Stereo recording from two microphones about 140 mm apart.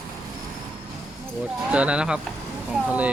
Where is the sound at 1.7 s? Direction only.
10° right (ahead or behind).